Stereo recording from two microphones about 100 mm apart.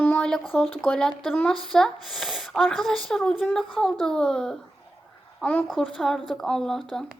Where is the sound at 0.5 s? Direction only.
Centre (ahead or behind).